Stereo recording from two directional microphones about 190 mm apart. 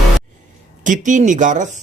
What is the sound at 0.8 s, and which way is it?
Speech, 40° right (ahead or behind).